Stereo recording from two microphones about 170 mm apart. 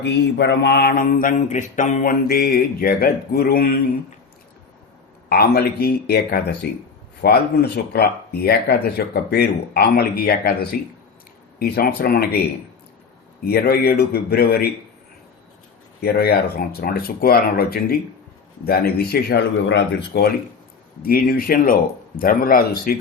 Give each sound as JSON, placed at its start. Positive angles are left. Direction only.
{"t": 0.0, "sound": "speech", "side_deg": 90}
{"t": 5.3, "sound": "speech", "side_deg": 65}
{"t": 13.4, "sound": "speech", "side_deg": 65}
{"t": 16.0, "sound": "speech", "side_deg": 65}
{"t": 21.0, "sound": "speech", "side_deg": 60}